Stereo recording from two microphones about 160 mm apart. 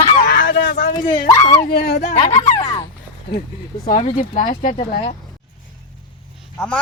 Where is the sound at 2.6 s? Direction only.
30° left (ahead or behind).